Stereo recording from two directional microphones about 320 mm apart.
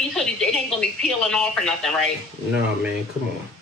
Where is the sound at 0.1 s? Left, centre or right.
Centre.